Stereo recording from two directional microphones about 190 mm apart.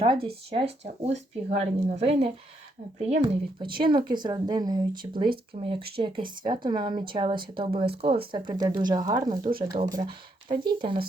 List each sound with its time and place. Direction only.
0.0 s speech: 30° right (ahead or behind)